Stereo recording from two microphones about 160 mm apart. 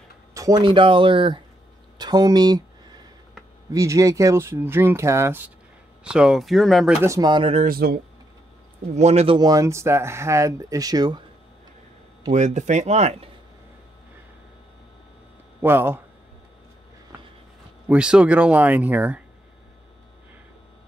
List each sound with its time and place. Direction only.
0.3 s speech: 20° right (ahead or behind)
3.7 s speech: 20° right (ahead or behind); by 7.0 s centre (ahead or behind)
7.0 s speech: 20° right (ahead or behind)
7.6 s speech: 70° right (ahead or behind)
8.9 s speech: 40° right (ahead or behind)
9.4 s speech: 20° right (ahead or behind)
12.3 s speech: 45° right (ahead or behind)
15.6 s speech: 15° right (ahead or behind)
17.8 s speech: 5° right (ahead or behind)